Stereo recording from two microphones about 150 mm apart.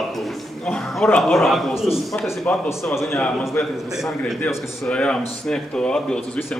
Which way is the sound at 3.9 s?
Centre (ahead or behind).